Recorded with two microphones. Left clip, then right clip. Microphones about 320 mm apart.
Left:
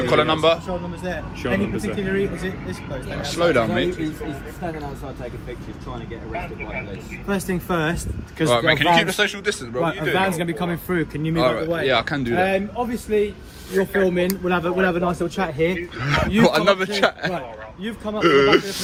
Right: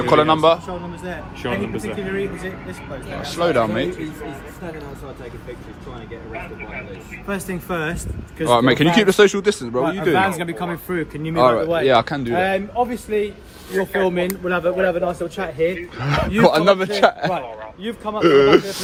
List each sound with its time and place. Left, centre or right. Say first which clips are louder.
0.0 s speech: right 3 dB; centre
1.4 s a man's voice: left 1 dB; right
2.0 s speech: left 3 dB; centre
3.8 s speech: left 2 dB; centre
7.3 s speech: left 2 dB; centre
8.4 s speech: right 3 dB; centre
9.0 s a man's voice: right 7 dB; right
10.2 s speech: right 2 dB; centre
11.3 s speech: right 5 dB; centre
12.4 s a man's voice: right 3 dB; right
14.1 s speech: even; centre
14.4 s a man's voice: right 4 dB; centre
16.0 s a man's voice: right 2 dB; centre; by 18.2 s right
18.2 s speech: right 3 dB; centre